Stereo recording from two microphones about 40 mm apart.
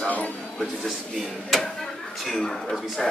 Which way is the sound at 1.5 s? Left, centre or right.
Centre.